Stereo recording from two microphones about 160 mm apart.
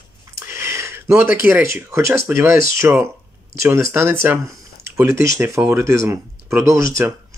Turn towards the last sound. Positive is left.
turn(degrees=-20)  # may be behind; listen again after turning